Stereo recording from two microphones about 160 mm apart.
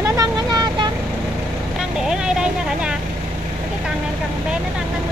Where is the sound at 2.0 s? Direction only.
5° right (ahead or behind).